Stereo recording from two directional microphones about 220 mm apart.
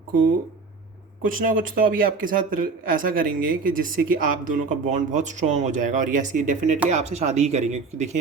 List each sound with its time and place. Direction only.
1.2 s speech: 40° right (ahead or behind)